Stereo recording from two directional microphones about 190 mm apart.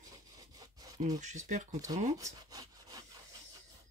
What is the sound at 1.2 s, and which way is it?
Speech, 40° right (ahead or behind).